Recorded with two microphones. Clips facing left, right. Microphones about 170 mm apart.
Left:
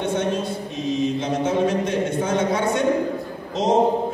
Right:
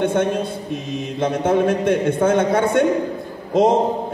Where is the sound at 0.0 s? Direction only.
55° right (ahead or behind).